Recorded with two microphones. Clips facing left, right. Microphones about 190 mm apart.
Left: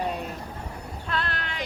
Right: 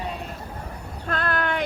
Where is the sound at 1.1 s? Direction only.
50° right (ahead or behind).